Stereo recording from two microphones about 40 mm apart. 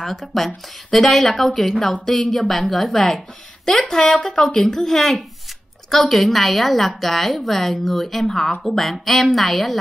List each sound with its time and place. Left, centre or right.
0.0 s a woman's voice: centre
8.3 s speech: centre
8.6 s a woman's voice: centre